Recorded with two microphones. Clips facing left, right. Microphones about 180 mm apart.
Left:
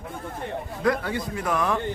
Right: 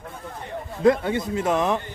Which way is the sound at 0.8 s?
25° right (ahead or behind).